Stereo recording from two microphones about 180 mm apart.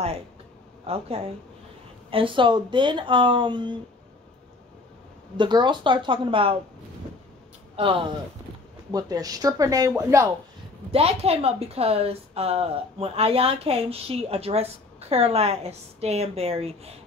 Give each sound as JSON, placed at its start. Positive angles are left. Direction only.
{"t": 0.8, "sound": "speech", "side_deg": -35}
{"t": 5.4, "sound": "speech", "side_deg": -25}
{"t": 7.7, "sound": "speech", "side_deg": -30}
{"t": 10.9, "sound": "speech", "side_deg": -35}